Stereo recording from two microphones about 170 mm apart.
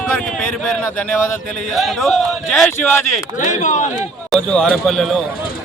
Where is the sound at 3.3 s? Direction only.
45° left (ahead or behind).